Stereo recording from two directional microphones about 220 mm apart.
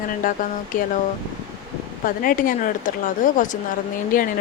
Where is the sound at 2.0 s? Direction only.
40° left (ahead or behind).